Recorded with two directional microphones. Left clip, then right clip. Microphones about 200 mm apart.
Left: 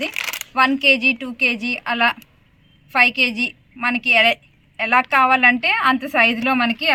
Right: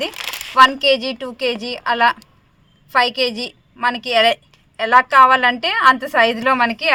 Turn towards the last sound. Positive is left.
turn(degrees=-55)  # may be behind; listen again after turning